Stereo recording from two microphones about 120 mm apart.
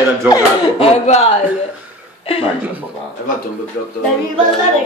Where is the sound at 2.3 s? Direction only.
50° left (ahead or behind).